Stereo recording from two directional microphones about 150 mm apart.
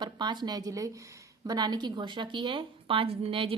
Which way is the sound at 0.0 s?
30° right (ahead or behind).